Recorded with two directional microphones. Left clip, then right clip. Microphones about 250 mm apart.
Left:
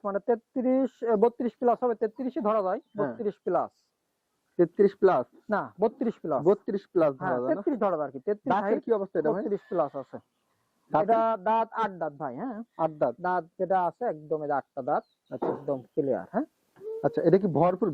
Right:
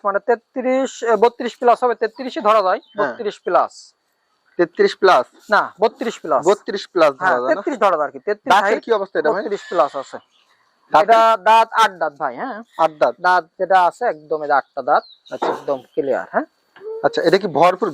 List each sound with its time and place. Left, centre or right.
0.0 s speech: centre
11.9 s speech: right
12.3 s speech: centre
13.4 s speech: centre
13.7 s speech: centre
14.8 s speech: right
15.1 s speech: centre